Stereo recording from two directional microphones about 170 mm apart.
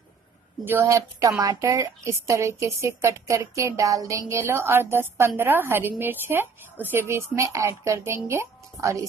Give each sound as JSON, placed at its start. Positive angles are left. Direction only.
{"t": 0.7, "sound": "a woman's voice", "side_deg": -15}